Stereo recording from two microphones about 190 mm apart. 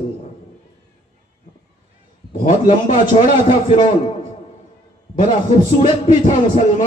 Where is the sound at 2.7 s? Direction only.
30° left (ahead or behind).